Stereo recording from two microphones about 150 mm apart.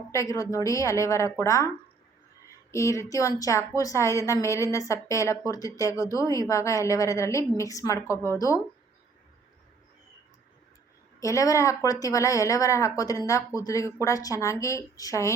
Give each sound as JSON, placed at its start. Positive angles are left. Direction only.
{"t": 0.1, "sound": "speech", "side_deg": 20}
{"t": 2.7, "sound": "speech", "side_deg": 20}
{"t": 11.2, "sound": "speech", "side_deg": 20}